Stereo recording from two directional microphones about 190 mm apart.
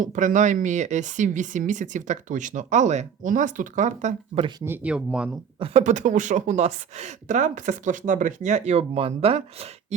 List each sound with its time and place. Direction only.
0.0 s speech: 45° right (ahead or behind)
4.6 s speech: 10° right (ahead or behind)
5.5 s speech: 30° right (ahead or behind)